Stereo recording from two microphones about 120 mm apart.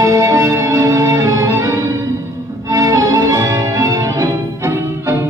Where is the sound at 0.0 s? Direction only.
25° right (ahead or behind).